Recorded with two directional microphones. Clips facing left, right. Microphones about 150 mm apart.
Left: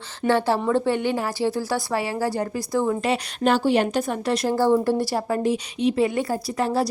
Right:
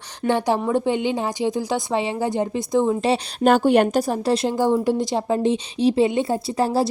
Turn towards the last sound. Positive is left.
turn(degrees=-30)  # may be behind; listen again after turning